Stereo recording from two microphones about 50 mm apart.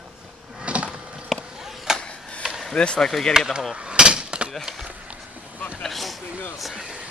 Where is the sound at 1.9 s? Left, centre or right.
Centre.